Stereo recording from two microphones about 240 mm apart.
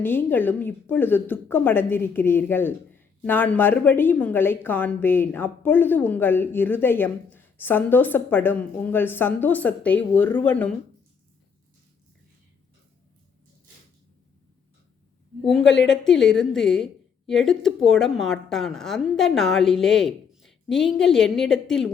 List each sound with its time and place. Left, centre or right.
0.0 s a woman's voice: centre
15.6 s a woman's voice: left
16.0 s a woman's voice: centre